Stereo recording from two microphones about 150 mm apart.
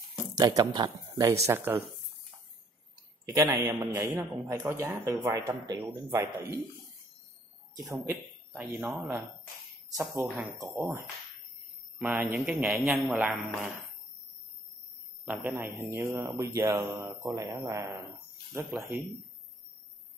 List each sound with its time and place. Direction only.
0.1 s a sound: 25° right (ahead or behind)
0.7 s speech: 25° right (ahead or behind)
1.5 s a man's voice: 15° right (ahead or behind)
3.3 s a man's voice: 20° right (ahead or behind)
7.9 s speech: 10° right (ahead or behind)
12.0 s a man's voice: 10° right (ahead or behind)
15.2 s a man's voice: 10° right (ahead or behind)